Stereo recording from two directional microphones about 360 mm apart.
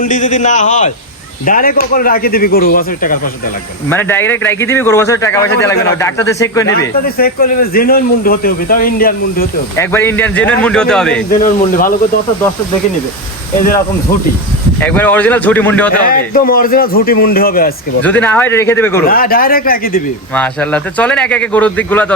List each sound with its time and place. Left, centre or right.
0.0 s speech: left
3.8 s speech: centre
7.2 s speech: left
9.7 s a man's voice: centre
11.3 s speech: left
14.8 s a man's voice: centre
16.0 s speech: left
18.0 s speech: centre
19.0 s speech: left
20.3 s a man's voice: centre